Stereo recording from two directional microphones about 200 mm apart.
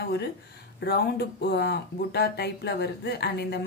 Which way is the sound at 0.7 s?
55° left (ahead or behind).